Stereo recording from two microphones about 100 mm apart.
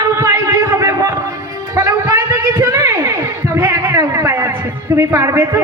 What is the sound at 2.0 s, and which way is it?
A man's voice, 40° right (ahead or behind).